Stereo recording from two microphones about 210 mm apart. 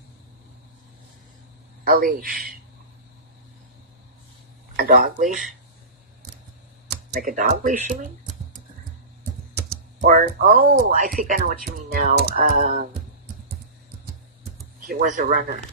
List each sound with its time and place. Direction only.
1.9 s speech: 45° right (ahead or behind)
4.7 s speech: 45° right (ahead or behind)
6.9 s speech: 45° right (ahead or behind)
9.6 s speech: 45° right (ahead or behind)
14.9 s speech: 40° right (ahead or behind)